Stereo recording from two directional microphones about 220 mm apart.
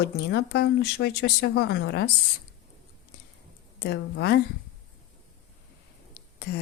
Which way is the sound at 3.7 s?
50° left (ahead or behind).